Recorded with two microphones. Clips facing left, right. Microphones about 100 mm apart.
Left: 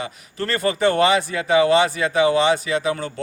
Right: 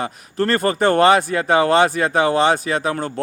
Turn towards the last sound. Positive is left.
turn(degrees=-45)  # may be behind; listen again after turning